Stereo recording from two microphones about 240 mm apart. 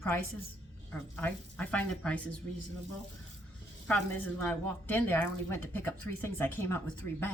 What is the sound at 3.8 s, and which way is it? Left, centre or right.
A woman's voice, centre.